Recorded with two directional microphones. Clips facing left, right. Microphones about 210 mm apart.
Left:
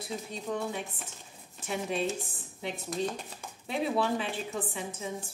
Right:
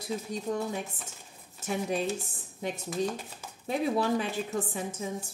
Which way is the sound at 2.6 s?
45° right (ahead or behind).